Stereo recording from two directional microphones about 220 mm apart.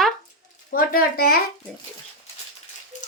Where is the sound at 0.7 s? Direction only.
45° left (ahead or behind).